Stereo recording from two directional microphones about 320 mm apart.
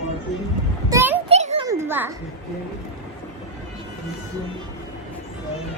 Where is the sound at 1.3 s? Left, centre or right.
Centre.